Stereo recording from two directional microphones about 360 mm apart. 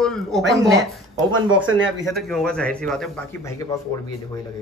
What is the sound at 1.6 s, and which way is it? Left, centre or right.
Speech, right.